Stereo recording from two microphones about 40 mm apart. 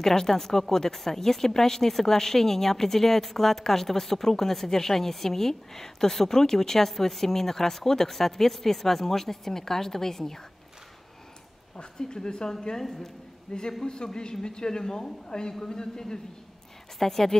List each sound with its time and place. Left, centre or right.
0.0 s a woman's voice: centre
11.7 s a woman's voice: left